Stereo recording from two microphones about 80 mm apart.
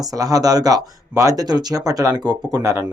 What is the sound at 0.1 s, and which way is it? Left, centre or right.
Speech, right.